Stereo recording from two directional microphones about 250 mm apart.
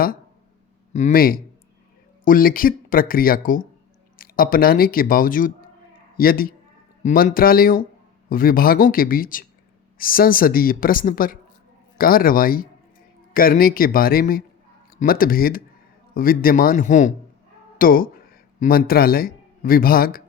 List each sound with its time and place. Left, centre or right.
0.9 s speech: left